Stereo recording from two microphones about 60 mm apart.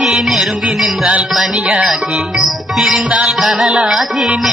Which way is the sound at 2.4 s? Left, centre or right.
Centre.